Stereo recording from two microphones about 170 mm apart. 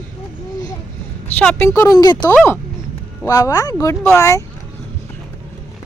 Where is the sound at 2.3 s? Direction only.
10° left (ahead or behind).